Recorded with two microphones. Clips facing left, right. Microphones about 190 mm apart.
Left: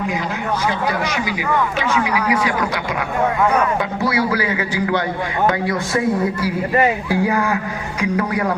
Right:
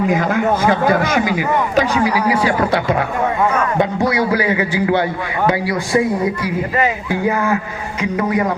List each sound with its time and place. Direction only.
0.1 s a man's voice: 50° right (ahead or behind)
1.7 s speech: 40° right (ahead or behind); by 4.9 s 20° right (ahead or behind)
7.1 s speech: centre (ahead or behind)